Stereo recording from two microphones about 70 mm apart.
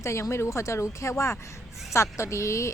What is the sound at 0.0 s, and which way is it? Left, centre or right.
A woman's voice, left.